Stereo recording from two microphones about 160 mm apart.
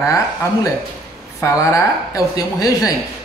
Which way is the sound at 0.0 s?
20° left (ahead or behind).